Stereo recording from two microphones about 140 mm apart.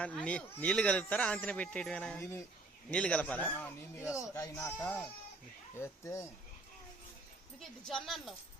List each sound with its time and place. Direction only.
0.0 s speech: 10° left (ahead or behind)
7.6 s a woman's voice: centre (ahead or behind)